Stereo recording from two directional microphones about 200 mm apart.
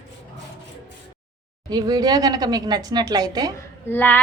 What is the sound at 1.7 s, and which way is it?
A woman's voice, 20° right (ahead or behind).